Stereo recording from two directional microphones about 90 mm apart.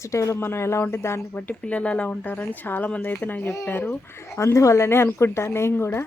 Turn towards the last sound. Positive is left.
turn(degrees=25)  # may be behind; listen again after turning